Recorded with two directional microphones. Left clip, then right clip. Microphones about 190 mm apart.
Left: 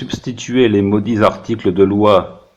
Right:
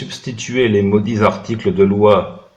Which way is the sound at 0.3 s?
45° left (ahead or behind).